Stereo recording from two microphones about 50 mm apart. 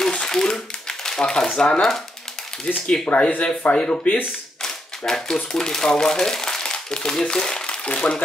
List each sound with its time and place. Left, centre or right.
0.1 s a sound: centre
2.7 s speech: left
4.6 s speech: centre